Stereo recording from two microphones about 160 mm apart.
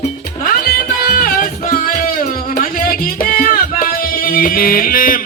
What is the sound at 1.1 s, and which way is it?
Music, 65° left (ahead or behind).